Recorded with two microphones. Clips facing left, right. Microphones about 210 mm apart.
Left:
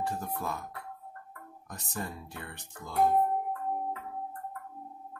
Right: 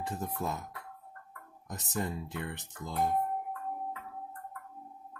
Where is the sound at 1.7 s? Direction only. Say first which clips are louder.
Right 4 dB; 20° right (ahead or behind).